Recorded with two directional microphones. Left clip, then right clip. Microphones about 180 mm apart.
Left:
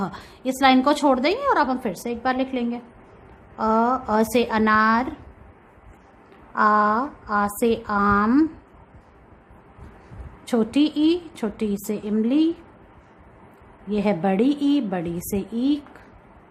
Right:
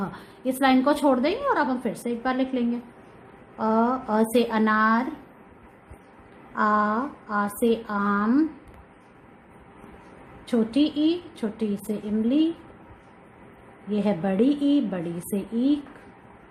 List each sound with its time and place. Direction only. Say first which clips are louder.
0.0 s a woman's voice: left 2 dB; 20° left (ahead or behind)
6.5 s a woman's voice: left 4 dB; 15° left (ahead or behind)
10.4 s a woman's voice: left 2 dB; 25° left (ahead or behind)
13.9 s a woman's voice: left 3 dB; 15° left (ahead or behind)